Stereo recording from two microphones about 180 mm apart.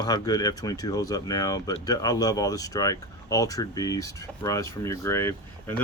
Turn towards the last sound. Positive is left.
turn(degrees=15)  # may be behind; listen again after turning